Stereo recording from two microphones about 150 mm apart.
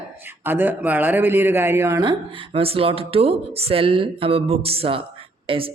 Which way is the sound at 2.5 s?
40° right (ahead or behind).